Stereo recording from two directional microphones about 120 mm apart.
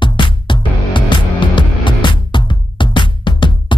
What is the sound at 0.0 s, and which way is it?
Music, 40° left (ahead or behind).